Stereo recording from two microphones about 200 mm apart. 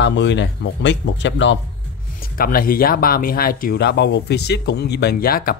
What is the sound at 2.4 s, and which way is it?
Speech, 45° left (ahead or behind).